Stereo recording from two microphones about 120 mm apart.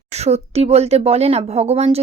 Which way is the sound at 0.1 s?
65° right (ahead or behind).